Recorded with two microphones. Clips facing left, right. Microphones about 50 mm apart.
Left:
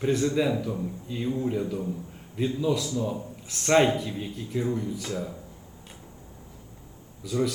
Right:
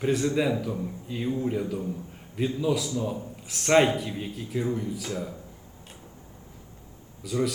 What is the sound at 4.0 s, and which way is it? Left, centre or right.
Speech, centre.